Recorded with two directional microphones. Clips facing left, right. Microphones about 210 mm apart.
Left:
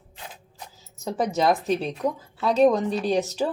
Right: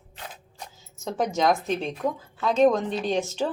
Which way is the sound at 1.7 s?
35° left (ahead or behind).